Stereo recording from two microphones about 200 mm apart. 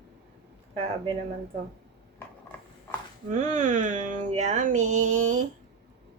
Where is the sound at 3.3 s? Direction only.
40° right (ahead or behind).